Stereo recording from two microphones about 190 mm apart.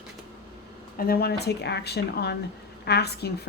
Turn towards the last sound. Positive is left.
turn(degrees=60)  # may be behind; listen again after turning